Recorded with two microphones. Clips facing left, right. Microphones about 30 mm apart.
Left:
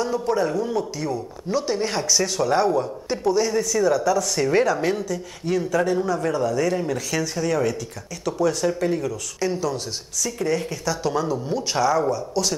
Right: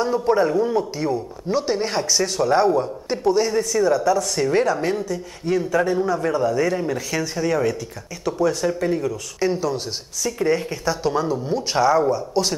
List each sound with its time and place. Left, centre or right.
0.0 s a man's voice: right; by 9.1 s centre
9.1 s speech: centre